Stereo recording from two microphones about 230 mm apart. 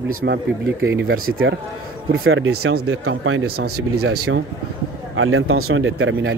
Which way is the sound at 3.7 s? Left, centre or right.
Right.